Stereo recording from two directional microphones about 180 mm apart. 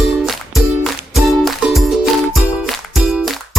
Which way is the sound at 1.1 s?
Centre (ahead or behind).